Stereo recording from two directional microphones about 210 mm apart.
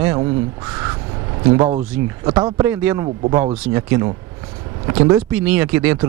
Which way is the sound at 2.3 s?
20° right (ahead or behind).